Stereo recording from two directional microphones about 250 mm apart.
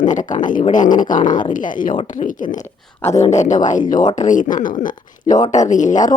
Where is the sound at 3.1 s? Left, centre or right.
Left.